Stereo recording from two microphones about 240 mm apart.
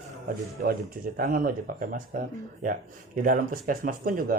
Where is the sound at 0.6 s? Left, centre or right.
Right.